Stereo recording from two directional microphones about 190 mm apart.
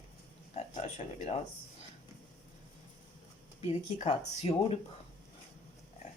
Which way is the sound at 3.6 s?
35° left (ahead or behind).